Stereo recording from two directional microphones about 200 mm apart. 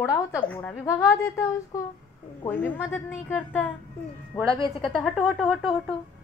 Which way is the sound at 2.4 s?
10° left (ahead or behind).